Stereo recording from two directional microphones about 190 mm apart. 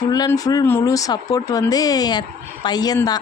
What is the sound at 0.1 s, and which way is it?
Speech, 20° left (ahead or behind).